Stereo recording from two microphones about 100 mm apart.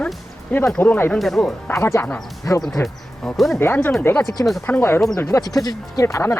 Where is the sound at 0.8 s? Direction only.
20° left (ahead or behind).